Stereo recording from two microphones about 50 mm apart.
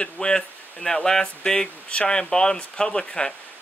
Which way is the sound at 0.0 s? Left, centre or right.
Centre.